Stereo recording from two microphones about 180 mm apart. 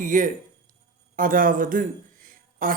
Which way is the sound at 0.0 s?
45° right (ahead or behind).